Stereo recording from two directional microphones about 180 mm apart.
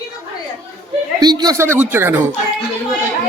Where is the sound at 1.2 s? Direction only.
20° right (ahead or behind).